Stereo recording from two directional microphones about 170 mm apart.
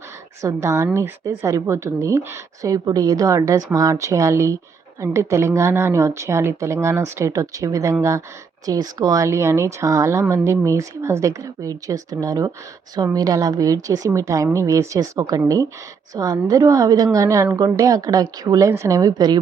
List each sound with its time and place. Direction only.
0.4 s a woman's voice: 15° right (ahead or behind)